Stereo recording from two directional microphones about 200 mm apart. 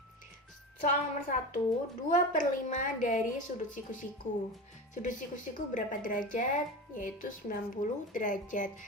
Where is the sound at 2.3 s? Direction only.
40° left (ahead or behind).